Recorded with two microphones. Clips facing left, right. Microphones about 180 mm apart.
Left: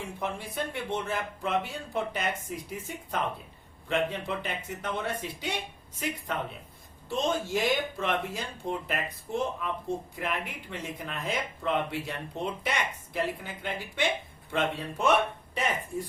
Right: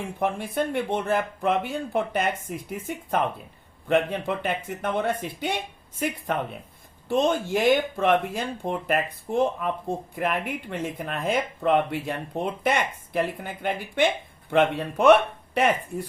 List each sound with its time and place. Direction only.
0.2 s speech: 55° right (ahead or behind)
7.1 s speech: 55° right (ahead or behind)